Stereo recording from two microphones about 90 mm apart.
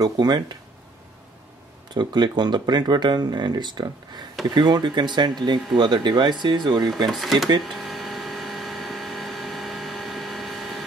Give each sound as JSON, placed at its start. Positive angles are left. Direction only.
{"t": 0.0, "sound": "speech", "side_deg": -50}
{"t": 2.0, "sound": "speech", "side_deg": -55}
{"t": 7.1, "sound": "speech", "side_deg": 0}
{"t": 7.6, "sound": "a sound", "side_deg": 0}